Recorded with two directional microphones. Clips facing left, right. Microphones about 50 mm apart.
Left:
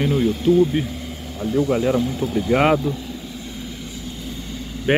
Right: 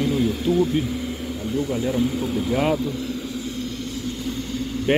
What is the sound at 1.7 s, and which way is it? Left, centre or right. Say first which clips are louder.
Speech: left 5 dB; left.